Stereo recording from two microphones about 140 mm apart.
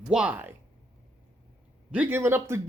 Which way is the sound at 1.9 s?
10° right (ahead or behind).